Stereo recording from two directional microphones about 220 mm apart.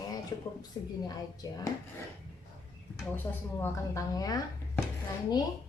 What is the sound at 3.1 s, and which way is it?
Speech, 10° left (ahead or behind).